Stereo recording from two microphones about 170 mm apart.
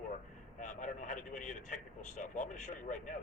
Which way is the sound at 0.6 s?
45° left (ahead or behind).